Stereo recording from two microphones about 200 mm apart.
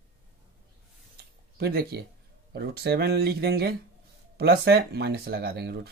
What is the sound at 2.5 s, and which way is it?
Speech, 50° right (ahead or behind).